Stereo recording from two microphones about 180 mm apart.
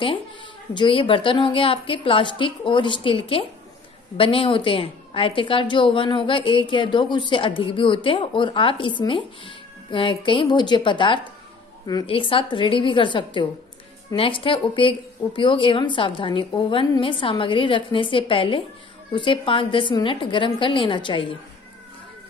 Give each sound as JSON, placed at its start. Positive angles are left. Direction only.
{"t": 0.7, "sound": "a woman's voice", "side_deg": 30}